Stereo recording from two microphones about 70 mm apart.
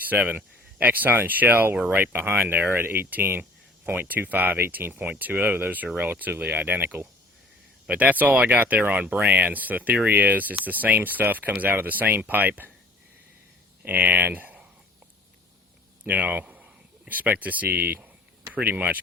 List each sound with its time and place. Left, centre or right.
0.0 s speech: right
13.8 s speech: right
16.0 s speech: right